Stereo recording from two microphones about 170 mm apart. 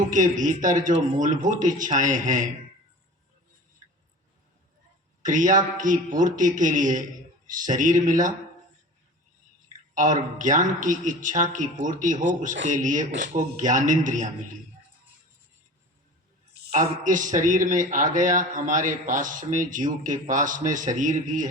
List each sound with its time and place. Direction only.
0.1 s a man's voice: 50° right (ahead or behind)
5.2 s a man's voice: 50° right (ahead or behind)
9.9 s a man's voice: 50° right (ahead or behind)
16.6 s a sound: 70° right (ahead or behind)
17.0 s a man's voice: 50° right (ahead or behind)